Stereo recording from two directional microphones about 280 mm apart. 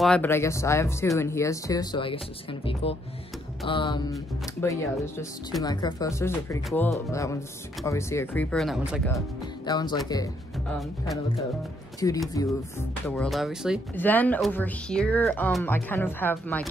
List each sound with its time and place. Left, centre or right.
0.0 s speech: centre
9.7 s speech: centre
12.0 s speech: centre
13.1 s speech: centre